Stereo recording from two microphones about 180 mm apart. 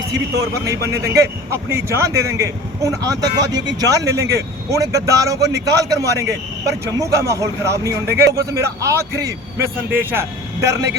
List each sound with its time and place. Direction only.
0.3 s speech: 20° right (ahead or behind)